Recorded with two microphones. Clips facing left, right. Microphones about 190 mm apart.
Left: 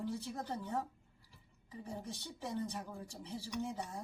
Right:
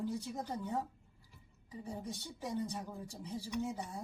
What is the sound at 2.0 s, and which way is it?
Speech, 15° right (ahead or behind).